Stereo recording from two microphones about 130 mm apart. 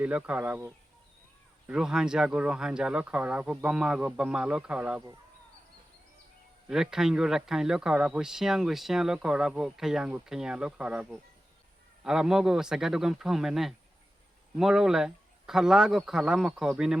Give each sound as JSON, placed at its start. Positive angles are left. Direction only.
{"t": 0.0, "sound": "speech", "side_deg": -10}
{"t": 6.7, "sound": "speech", "side_deg": -5}